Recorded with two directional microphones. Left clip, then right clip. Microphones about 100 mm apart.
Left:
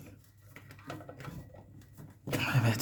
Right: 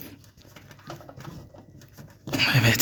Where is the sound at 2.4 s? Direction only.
25° right (ahead or behind).